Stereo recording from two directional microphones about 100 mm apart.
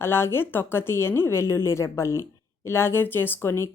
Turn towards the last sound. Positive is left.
turn(degrees=25)  # may be behind; listen again after turning